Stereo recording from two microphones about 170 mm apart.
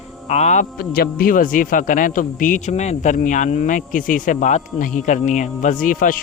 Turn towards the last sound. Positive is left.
turn(degrees=55)  # may be behind; listen again after turning